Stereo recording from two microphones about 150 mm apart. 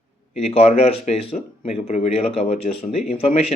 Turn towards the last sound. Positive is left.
turn(degrees=45)  # may be behind; listen again after turning